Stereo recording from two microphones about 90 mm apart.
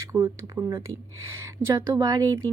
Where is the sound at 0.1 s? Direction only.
30° right (ahead or behind).